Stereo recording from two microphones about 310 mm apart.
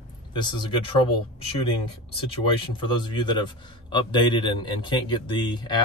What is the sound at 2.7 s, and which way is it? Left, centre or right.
A man's voice, centre.